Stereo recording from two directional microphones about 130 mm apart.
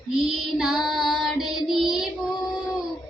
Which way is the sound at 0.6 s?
Centre (ahead or behind).